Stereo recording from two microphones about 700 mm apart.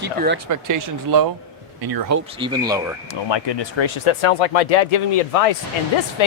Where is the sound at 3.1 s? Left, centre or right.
Left.